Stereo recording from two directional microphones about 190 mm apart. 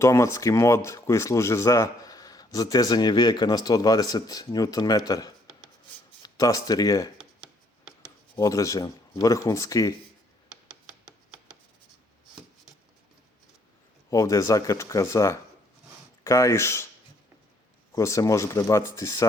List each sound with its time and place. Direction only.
0.0 s speech: 15° left (ahead or behind)
14.1 s speech: 15° left (ahead or behind)
17.9 s speech: 15° left (ahead or behind)